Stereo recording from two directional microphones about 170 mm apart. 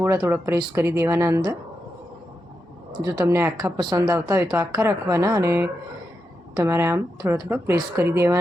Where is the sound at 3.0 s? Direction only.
20° right (ahead or behind).